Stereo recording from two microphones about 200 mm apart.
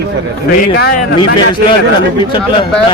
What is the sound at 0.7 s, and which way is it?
Speech, 50° left (ahead or behind).